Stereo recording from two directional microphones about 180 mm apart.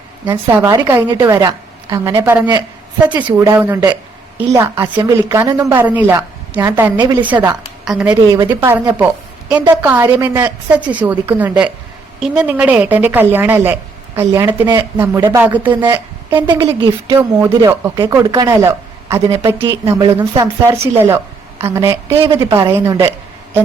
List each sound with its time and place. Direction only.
0.5 s a woman's voice: 15° right (ahead or behind)
7.3 s speech: 20° right (ahead or behind)
7.9 s a woman's voice: 5° right (ahead or behind)
15.7 s a woman's voice: 25° right (ahead or behind)